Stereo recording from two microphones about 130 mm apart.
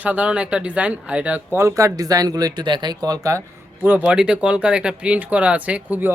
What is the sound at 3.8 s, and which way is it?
Speech, 10° right (ahead or behind).